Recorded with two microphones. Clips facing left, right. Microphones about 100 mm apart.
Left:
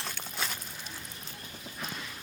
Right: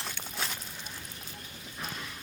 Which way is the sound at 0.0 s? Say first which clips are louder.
Even; centre (ahead or behind).